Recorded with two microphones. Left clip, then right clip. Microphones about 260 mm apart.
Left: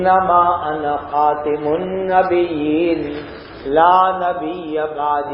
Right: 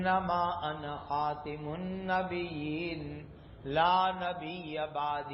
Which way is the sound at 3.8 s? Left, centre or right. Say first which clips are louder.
Left 15 dB; right.